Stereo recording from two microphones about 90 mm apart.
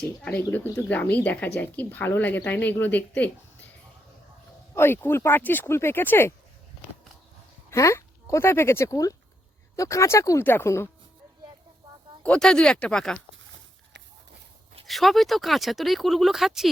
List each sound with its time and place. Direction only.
0.3 s a woman's voice: 20° left (ahead or behind)
4.7 s a woman's voice: 30° left (ahead or behind)
7.7 s a woman's voice: 30° left (ahead or behind)
12.2 s speech: 10° left (ahead or behind)
14.8 s speech: centre (ahead or behind)